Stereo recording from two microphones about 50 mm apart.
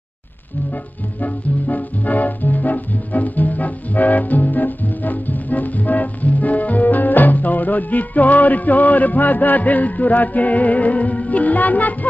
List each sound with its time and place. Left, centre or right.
2.0 s music: left